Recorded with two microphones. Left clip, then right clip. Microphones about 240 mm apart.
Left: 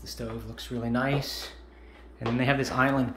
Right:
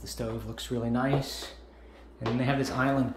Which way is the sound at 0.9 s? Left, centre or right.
Centre.